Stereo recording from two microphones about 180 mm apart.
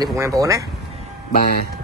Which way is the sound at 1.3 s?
55° left (ahead or behind).